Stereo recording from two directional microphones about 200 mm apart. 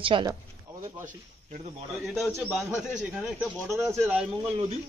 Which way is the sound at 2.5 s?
5° right (ahead or behind).